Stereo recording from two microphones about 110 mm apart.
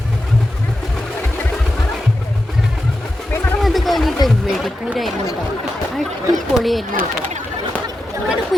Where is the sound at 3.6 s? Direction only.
Centre (ahead or behind).